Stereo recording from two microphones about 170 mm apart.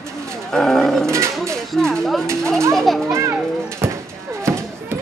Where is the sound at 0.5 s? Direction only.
Centre (ahead or behind).